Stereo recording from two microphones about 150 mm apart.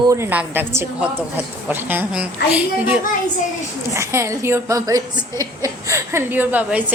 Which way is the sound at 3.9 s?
20° right (ahead or behind).